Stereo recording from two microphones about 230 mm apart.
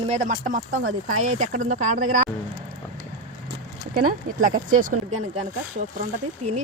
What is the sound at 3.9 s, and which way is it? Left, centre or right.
Speech, right.